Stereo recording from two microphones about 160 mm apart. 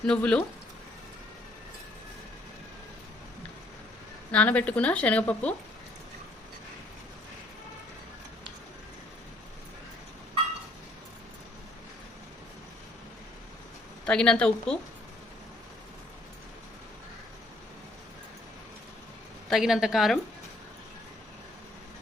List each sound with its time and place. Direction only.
0.0 s speech: 5° left (ahead or behind)
4.3 s speech: 10° left (ahead or behind)
14.0 s a woman's voice: 5° left (ahead or behind)
19.5 s a woman's voice: centre (ahead or behind)